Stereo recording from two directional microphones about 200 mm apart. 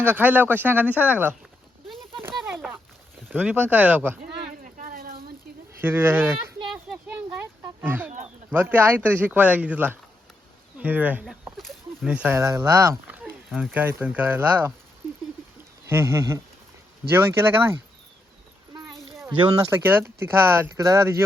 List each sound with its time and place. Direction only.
0.0 s speech: 10° right (ahead or behind)
2.2 s a sound: 5° right (ahead or behind)
3.2 s speech: 10° right (ahead or behind)
4.2 s a sound: 40° right (ahead or behind)
5.8 s speech: 10° right (ahead or behind)
6.7 s a sound: 5° right (ahead or behind)
8.4 s speech: 10° right (ahead or behind)
15.9 s speech: 15° right (ahead or behind)
19.8 s speech: 10° right (ahead or behind)